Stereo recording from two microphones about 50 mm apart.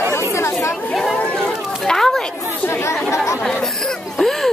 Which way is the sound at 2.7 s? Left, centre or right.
Left.